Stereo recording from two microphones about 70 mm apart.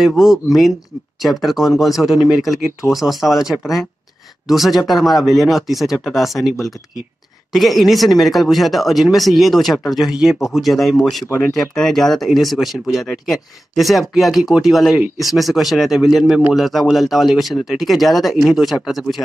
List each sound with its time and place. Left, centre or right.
0.0 s speech: centre
7.5 s speech: centre
11.2 s speech: left
11.5 s speech: centre